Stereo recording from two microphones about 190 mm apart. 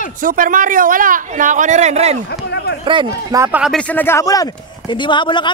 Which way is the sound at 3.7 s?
10° left (ahead or behind).